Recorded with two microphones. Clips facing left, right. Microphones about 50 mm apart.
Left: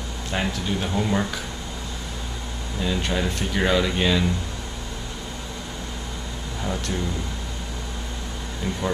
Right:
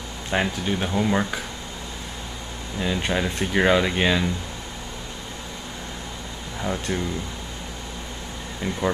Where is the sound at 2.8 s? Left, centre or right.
Centre.